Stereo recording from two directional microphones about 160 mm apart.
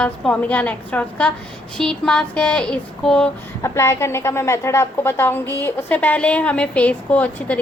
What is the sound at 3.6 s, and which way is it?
A woman's voice, 15° left (ahead or behind).